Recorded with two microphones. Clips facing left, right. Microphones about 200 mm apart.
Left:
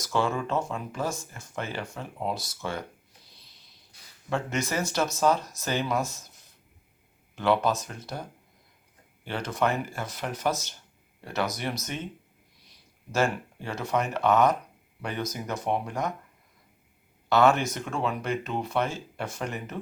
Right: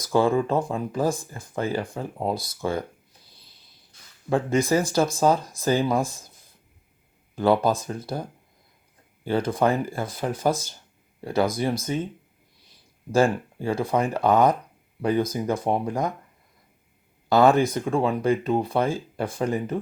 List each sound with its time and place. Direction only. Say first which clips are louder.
0.0 s speech: right 7 dB; 35° right (ahead or behind)
4.3 s speech: right 8 dB; 30° right (ahead or behind)
7.3 s speech: right 4 dB; 35° right (ahead or behind)
9.2 s speech: right 6 dB; 35° right (ahead or behind)
13.1 s speech: right 6 dB; 30° right (ahead or behind)
17.3 s speech: right 4 dB; 35° right (ahead or behind)